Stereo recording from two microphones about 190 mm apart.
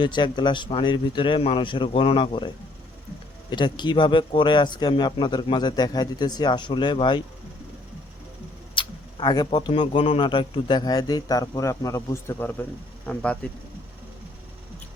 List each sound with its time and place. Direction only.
0.0 s speech: 25° left (ahead or behind)
3.5 s speech: 25° left (ahead or behind)
8.7 s speech: 25° left (ahead or behind); by 13.5 s 5° left (ahead or behind)